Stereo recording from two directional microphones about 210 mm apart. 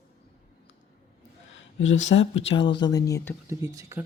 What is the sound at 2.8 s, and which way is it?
Speech, 15° left (ahead or behind).